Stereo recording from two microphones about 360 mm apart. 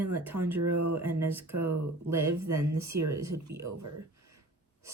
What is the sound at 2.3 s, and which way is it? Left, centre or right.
Speech, right.